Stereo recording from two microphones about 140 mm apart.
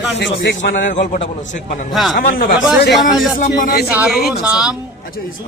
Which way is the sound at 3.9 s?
10° right (ahead or behind).